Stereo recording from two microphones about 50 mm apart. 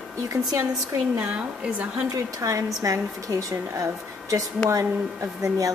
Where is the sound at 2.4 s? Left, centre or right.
Right.